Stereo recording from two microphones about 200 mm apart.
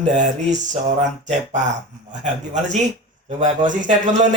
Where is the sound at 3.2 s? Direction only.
40° right (ahead or behind).